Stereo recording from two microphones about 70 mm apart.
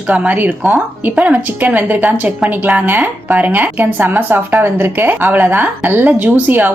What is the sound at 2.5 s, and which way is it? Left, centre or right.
A woman's voice, right.